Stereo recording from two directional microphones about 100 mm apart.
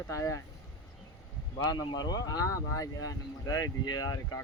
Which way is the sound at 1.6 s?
40° left (ahead or behind).